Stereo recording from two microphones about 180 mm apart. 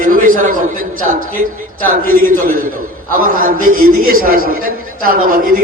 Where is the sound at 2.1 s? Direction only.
50° right (ahead or behind).